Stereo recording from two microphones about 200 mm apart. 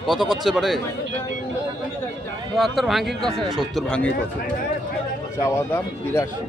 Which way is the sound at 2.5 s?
Centre (ahead or behind).